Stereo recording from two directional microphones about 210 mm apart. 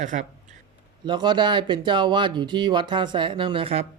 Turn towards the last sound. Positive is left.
turn(degrees=-25)  # may be behind; listen again after turning